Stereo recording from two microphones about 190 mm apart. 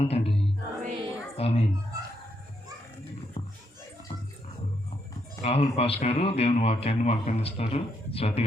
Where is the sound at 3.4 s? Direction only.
30° left (ahead or behind).